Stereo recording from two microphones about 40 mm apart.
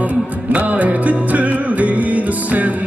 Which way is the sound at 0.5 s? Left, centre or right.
Right.